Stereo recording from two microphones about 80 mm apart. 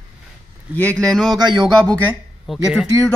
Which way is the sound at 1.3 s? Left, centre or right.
Right.